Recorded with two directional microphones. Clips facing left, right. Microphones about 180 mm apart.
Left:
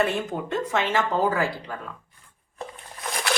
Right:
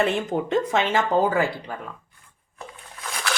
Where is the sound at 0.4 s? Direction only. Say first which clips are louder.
Right 3 dB; 20° right (ahead or behind).